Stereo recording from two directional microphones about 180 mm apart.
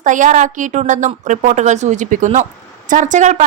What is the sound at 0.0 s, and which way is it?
A woman's voice, 45° right (ahead or behind).